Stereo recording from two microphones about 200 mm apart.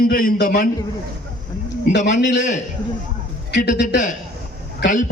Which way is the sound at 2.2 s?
60° left (ahead or behind).